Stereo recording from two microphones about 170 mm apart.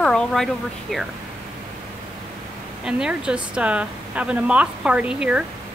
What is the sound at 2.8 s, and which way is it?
A woman's voice, 5° right (ahead or behind).